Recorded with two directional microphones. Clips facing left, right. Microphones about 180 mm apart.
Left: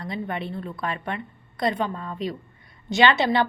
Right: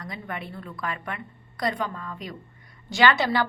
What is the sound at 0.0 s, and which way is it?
A woman's voice, 25° left (ahead or behind).